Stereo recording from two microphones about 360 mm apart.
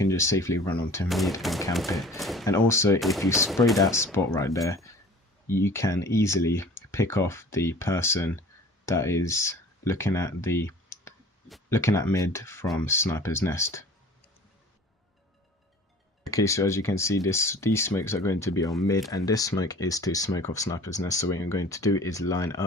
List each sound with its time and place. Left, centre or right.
0.0 s speech: centre
16.2 s speech: centre